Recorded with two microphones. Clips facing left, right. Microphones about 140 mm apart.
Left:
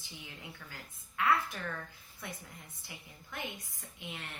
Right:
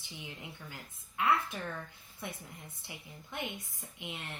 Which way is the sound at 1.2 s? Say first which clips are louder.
Even; 20° right (ahead or behind).